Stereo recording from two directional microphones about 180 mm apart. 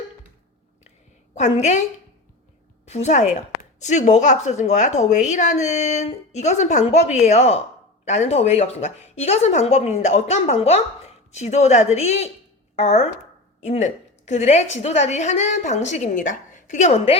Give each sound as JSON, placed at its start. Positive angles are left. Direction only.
{"t": 1.4, "sound": "speech", "side_deg": 40}
{"t": 2.8, "sound": "speech", "side_deg": 40}